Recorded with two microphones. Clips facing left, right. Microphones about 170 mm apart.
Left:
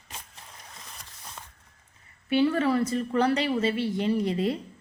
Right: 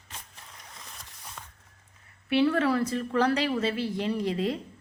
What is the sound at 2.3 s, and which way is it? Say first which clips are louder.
A woman's voice: left 1 dB; centre (ahead or behind).